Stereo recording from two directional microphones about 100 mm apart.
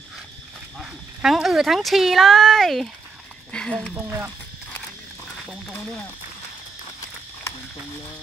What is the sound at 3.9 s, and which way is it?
Speech, 20° right (ahead or behind).